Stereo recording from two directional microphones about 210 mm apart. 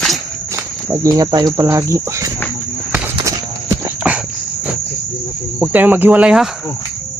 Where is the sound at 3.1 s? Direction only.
15° right (ahead or behind).